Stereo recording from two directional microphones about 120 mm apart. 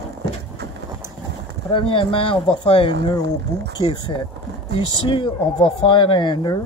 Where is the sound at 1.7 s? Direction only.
45° left (ahead or behind).